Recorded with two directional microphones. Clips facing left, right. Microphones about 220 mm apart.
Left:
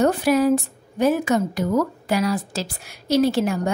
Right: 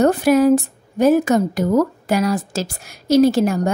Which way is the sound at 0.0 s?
45° right (ahead or behind).